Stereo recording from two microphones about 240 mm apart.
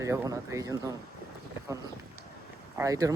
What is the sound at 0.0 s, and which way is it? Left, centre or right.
Speech, centre.